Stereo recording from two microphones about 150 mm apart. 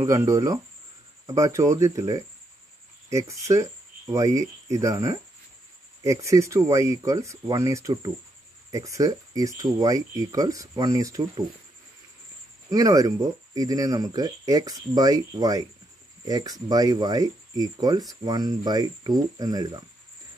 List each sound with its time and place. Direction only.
0.0 s speech: 20° right (ahead or behind)
12.6 s speech: 25° right (ahead or behind)